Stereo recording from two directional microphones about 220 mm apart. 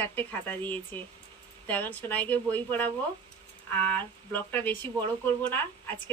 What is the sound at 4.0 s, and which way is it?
Speech, 10° left (ahead or behind).